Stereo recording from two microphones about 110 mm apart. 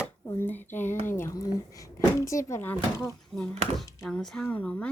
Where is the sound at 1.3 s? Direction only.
30° left (ahead or behind).